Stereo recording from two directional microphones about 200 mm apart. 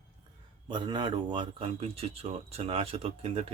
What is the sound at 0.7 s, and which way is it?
Speech, 20° right (ahead or behind).